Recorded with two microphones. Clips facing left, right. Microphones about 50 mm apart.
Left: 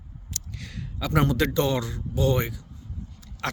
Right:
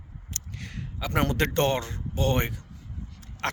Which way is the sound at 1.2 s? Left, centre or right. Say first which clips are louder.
Left 1 dB; right.